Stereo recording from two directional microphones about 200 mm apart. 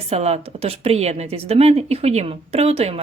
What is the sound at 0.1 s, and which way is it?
Speech, 30° right (ahead or behind).